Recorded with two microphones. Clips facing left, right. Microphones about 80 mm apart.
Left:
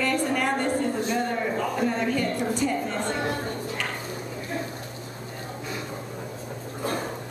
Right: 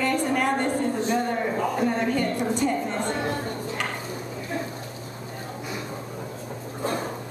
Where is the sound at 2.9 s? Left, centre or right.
Right.